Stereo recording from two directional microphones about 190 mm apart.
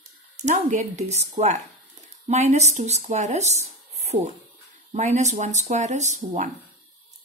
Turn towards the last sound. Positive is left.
turn(degrees=-40)  # may be behind; listen again after turning